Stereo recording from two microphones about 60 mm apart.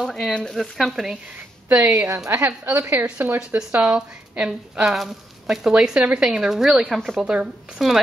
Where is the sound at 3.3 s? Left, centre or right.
Centre.